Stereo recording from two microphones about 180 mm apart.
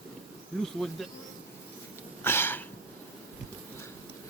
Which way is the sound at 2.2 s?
10° left (ahead or behind).